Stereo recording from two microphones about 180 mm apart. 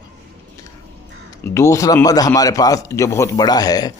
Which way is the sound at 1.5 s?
15° left (ahead or behind).